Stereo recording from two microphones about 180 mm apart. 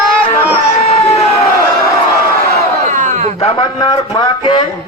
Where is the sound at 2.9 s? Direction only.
40° right (ahead or behind).